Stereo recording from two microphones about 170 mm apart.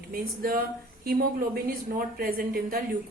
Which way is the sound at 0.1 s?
60° right (ahead or behind).